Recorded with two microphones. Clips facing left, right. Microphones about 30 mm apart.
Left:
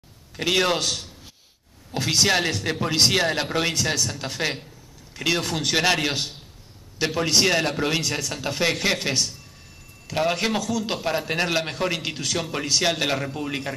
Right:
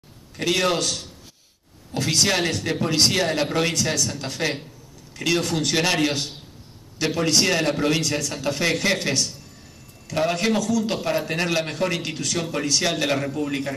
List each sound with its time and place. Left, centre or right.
0.4 s a man's voice: centre